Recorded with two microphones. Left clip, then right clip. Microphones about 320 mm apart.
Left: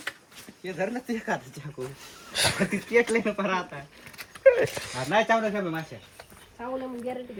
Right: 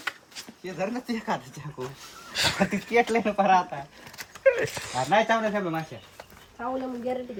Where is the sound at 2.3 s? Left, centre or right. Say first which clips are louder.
Right 1 dB; centre.